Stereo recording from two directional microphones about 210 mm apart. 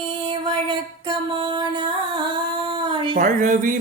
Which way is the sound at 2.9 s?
25° right (ahead or behind).